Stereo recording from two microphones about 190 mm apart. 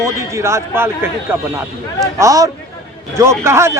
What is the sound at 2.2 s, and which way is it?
Speech, 15° right (ahead or behind).